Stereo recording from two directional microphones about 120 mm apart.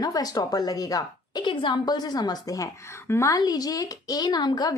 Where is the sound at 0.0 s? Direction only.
30° left (ahead or behind).